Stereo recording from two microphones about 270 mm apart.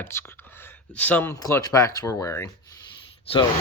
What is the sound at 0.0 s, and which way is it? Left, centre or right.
Speech, centre.